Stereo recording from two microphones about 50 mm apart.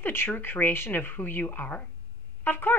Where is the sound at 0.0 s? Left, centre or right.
Left.